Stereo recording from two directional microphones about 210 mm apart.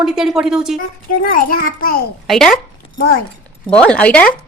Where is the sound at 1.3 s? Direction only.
40° left (ahead or behind).